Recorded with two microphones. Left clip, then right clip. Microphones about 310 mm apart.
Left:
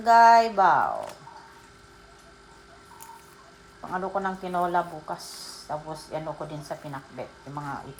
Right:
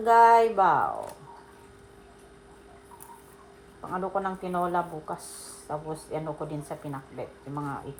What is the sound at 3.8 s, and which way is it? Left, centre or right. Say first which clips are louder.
Speech: left 1 dB; left.